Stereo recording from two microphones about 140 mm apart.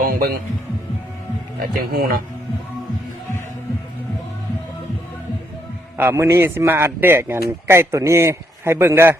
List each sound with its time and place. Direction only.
0.0 s music: 90° right
1.8 s speech: 90° right
6.0 s a man's voice: 15° right (ahead or behind)